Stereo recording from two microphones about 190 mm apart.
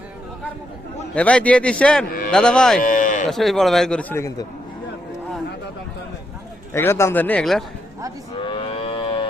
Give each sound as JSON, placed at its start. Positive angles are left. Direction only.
{"t": 1.1, "sound": "a man's voice", "side_deg": 5}
{"t": 2.0, "sound": "speech", "side_deg": 50}
{"t": 2.3, "sound": "a man's voice", "side_deg": 5}
{"t": 2.8, "sound": "cattle", "side_deg": 45}
{"t": 3.2, "sound": "a man's voice", "side_deg": 0}
{"t": 6.7, "sound": "a man's voice", "side_deg": 15}
{"t": 8.4, "sound": "livestock", "side_deg": 25}